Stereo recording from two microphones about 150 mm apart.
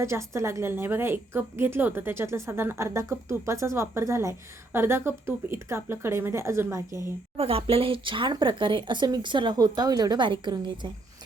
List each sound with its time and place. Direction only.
0.0 s a woman's voice: 20° right (ahead or behind)
7.3 s speech: 40° right (ahead or behind)